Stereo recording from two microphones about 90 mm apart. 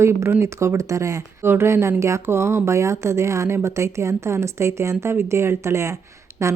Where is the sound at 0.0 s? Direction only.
30° right (ahead or behind).